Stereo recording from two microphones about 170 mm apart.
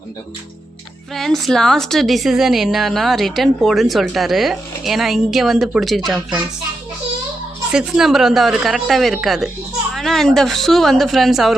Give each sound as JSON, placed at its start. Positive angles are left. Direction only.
{"t": 1.1, "sound": "a woman's voice", "side_deg": 0}
{"t": 7.7, "sound": "a woman's voice", "side_deg": -5}